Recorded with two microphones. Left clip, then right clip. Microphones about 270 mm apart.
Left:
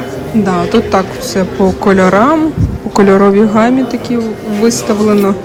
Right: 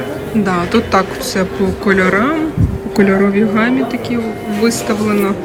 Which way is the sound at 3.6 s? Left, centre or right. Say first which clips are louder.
Left 4 dB; centre.